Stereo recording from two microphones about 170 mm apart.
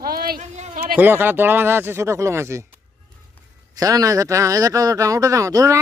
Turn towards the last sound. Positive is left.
turn(degrees=-20)  # may be behind; listen again after turning